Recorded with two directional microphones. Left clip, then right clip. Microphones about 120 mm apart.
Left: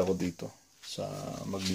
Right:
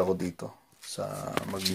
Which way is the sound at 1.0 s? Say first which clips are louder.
Right 3 dB; 5° left (ahead or behind).